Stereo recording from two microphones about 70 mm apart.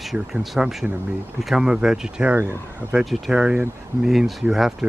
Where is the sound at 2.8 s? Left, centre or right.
Right.